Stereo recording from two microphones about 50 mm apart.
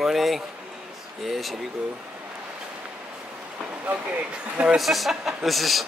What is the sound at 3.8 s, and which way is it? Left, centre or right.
Speech, right.